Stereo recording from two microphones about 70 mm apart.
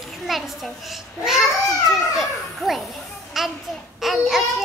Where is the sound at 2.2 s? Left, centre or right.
Centre.